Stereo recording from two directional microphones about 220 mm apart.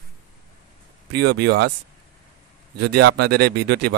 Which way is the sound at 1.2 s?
50° right (ahead or behind).